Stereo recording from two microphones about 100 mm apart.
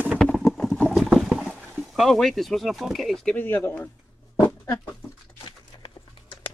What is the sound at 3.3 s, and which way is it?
Speech, 20° left (ahead or behind).